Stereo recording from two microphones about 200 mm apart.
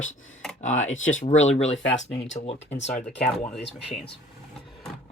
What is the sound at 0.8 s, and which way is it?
Speech, 75° left (ahead or behind).